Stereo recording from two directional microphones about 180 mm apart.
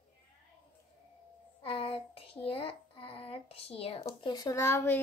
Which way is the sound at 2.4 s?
30° left (ahead or behind).